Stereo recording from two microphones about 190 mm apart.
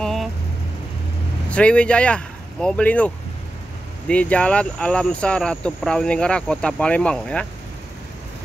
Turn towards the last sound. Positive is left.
turn(degrees=5)  # may be behind; listen again after turning